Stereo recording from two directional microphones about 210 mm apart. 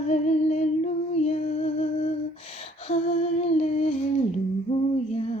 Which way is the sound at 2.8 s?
30° left (ahead or behind).